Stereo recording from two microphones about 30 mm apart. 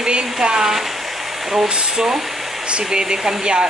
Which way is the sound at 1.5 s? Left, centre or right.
Right.